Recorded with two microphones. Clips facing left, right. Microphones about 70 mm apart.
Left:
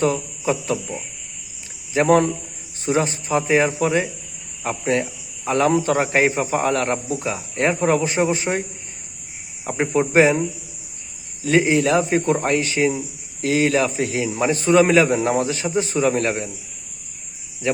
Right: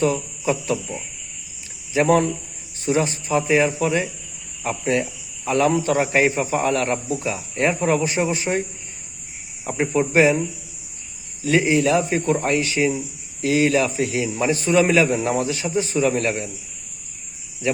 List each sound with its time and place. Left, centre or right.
0.0 s a man's voice: left
10.0 s a man's voice: left
11.4 s a man's voice: left